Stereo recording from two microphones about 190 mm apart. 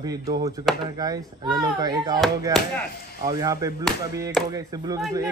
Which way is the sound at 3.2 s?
20° right (ahead or behind).